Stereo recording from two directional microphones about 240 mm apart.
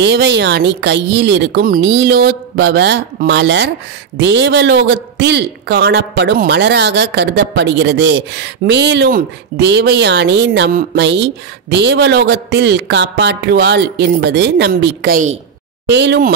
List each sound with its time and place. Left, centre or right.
0.0 s a woman's voice: right